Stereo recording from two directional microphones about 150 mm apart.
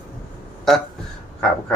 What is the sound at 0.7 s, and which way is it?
Speech, centre (ahead or behind).